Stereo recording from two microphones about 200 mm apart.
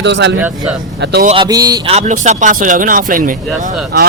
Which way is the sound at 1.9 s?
35° right (ahead or behind).